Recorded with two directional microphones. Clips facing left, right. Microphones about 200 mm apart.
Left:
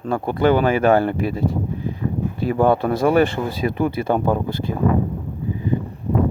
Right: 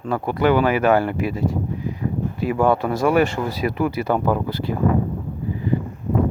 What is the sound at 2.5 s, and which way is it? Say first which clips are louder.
Speech: left 2 dB; 30° left (ahead or behind).